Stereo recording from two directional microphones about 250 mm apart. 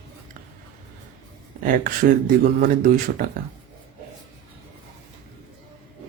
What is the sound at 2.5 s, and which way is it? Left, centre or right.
Speech, right.